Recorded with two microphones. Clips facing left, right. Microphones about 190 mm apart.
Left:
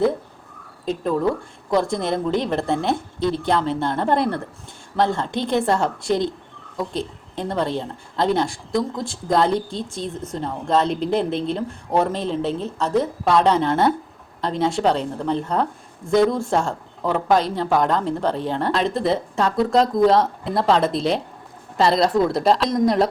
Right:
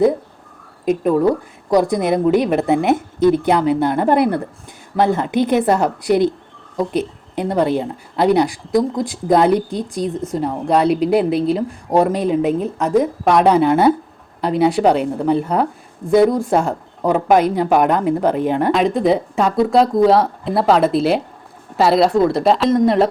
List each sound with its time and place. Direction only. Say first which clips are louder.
0.9 s speech: right 6 dB; 15° right (ahead or behind)